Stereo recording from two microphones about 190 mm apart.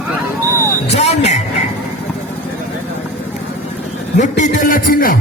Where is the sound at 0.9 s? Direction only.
35° left (ahead or behind).